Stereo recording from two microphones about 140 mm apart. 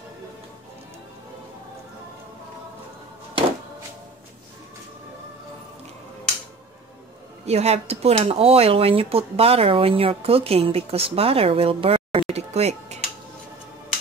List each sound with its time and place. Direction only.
7.4 s speech: 50° right (ahead or behind)